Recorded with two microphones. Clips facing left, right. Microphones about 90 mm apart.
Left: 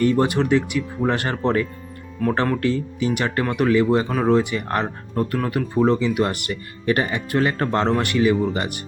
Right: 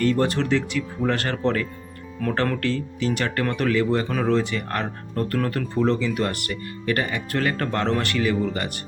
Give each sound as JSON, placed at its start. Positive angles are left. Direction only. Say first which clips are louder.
{"t": 0.0, "sound": "speech", "louder": "left 3 dB", "side_deg": 15}